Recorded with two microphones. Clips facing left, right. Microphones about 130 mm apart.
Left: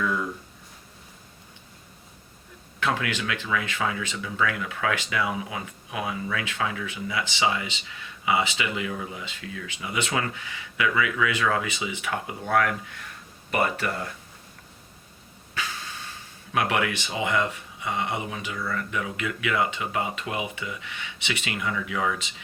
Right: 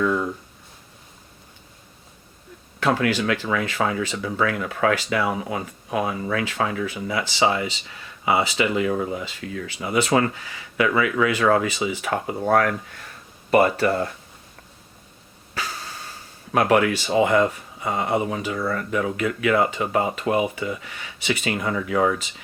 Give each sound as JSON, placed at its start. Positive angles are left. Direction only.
{"t": 0.0, "sound": "speech", "side_deg": -35}
{"t": 2.8, "sound": "speech", "side_deg": -35}
{"t": 15.5, "sound": "speech", "side_deg": -40}